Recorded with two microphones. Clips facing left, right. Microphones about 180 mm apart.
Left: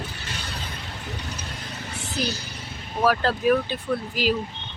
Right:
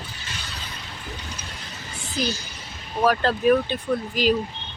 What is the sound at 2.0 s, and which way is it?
Speech, 65° left (ahead or behind).